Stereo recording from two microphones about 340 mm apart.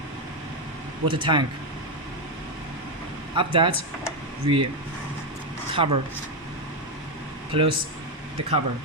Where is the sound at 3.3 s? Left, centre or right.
Centre.